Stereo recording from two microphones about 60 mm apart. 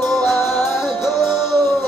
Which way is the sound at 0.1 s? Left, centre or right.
Centre.